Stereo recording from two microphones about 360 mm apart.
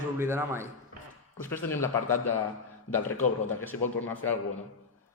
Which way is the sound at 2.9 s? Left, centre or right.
Left.